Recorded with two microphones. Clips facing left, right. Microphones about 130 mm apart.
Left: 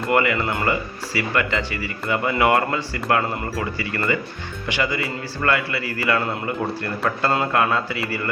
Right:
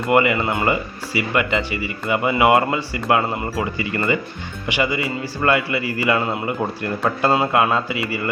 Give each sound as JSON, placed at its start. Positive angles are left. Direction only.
{"t": 0.1, "sound": "a man's voice", "side_deg": -20}